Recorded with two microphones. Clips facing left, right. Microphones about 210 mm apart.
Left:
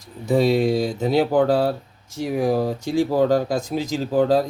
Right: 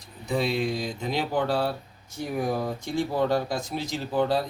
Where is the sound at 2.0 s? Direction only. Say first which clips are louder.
Left 6 dB; 90° left.